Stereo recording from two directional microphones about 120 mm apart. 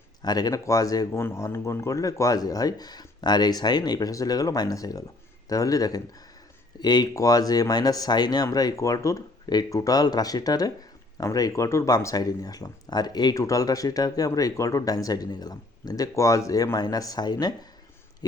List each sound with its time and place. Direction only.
0.2 s speech: 35° left (ahead or behind)